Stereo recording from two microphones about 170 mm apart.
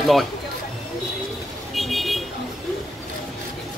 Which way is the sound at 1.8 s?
Centre (ahead or behind).